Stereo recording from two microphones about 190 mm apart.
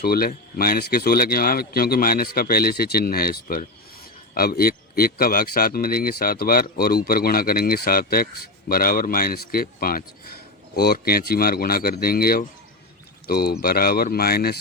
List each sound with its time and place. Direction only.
0.0 s speech: 50° left (ahead or behind)